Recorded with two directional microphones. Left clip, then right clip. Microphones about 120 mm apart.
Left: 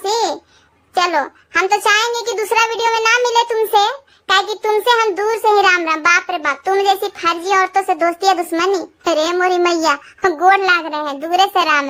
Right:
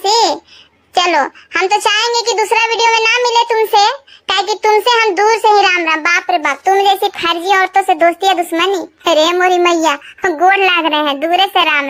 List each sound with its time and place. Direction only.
0.0 s babbling: 10° right (ahead or behind)
0.9 s a child's voice: 20° right (ahead or behind)
1.6 s child singing: 15° right (ahead or behind)
5.7 s child singing: centre (ahead or behind); by 11.3 s 15° right (ahead or behind)
11.3 s a child's voice: centre (ahead or behind)